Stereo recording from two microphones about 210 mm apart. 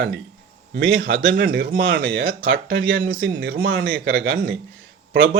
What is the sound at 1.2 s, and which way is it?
Speech, 60° right (ahead or behind).